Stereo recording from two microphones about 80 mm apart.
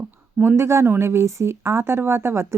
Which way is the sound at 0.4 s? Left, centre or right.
Right.